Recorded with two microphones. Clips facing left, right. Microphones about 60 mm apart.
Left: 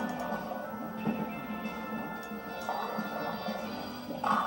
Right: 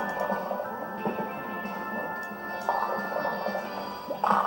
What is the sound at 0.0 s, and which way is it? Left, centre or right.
Music, right.